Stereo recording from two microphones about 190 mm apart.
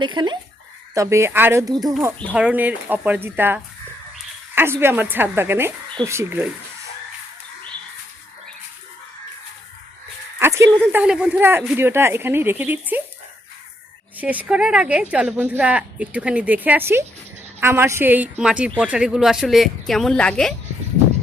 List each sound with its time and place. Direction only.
0.0 s speech: 25° right (ahead or behind)
0.9 s speech: 15° right (ahead or behind)
2.3 s speech: 5° right (ahead or behind)
10.4 s a sound: 15° right (ahead or behind)
10.9 s speech: 5° right (ahead or behind)
14.2 s speech: 10° right (ahead or behind)